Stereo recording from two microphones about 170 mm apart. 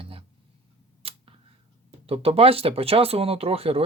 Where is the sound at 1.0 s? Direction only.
35° right (ahead or behind).